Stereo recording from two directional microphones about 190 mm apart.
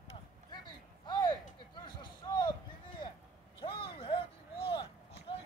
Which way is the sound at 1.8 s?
25° left (ahead or behind).